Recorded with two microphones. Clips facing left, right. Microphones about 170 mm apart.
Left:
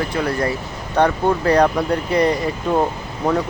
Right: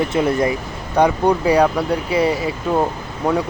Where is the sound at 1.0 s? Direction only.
10° right (ahead or behind).